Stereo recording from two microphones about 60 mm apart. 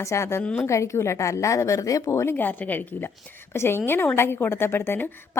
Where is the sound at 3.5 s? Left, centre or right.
Left.